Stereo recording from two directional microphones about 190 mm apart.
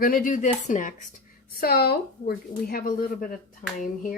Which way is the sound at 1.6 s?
55° left (ahead or behind).